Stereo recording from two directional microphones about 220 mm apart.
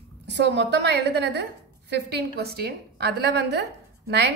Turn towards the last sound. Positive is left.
turn(degrees=-50)  # may be behind; listen again after turning